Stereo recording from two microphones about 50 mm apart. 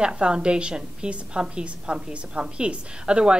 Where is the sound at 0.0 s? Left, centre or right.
Centre.